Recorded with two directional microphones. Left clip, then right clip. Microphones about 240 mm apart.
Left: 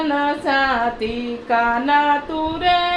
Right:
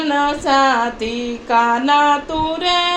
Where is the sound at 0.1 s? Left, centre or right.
Right.